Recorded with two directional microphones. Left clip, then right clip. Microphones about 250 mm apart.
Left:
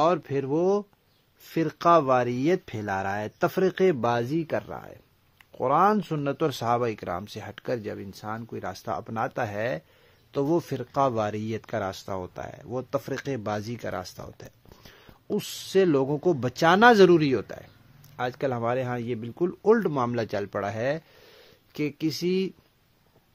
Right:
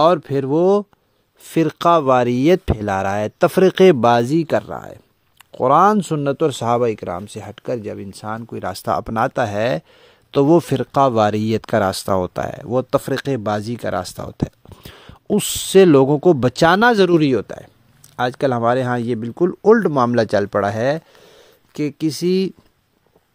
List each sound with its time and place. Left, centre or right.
0.0 s speech: right